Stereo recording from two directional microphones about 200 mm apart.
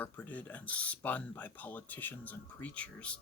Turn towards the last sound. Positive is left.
turn(degrees=5)  # may be behind; listen again after turning